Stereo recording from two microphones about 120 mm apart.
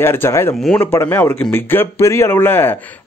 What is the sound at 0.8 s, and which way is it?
Speech, 20° left (ahead or behind).